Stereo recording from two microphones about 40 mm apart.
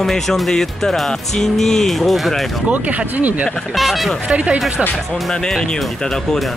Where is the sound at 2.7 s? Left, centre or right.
Right.